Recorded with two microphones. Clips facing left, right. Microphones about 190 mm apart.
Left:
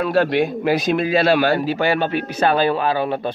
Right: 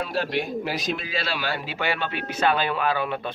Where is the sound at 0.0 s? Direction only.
60° left (ahead or behind).